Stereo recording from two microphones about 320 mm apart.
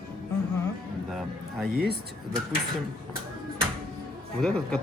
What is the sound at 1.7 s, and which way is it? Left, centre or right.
Speech, right.